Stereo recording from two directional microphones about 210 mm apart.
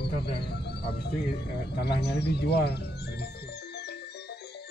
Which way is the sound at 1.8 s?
50° left (ahead or behind).